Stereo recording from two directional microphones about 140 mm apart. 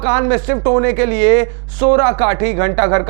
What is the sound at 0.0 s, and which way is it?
Speech, 20° right (ahead or behind).